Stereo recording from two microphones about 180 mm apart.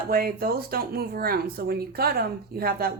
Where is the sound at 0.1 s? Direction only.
55° right (ahead or behind).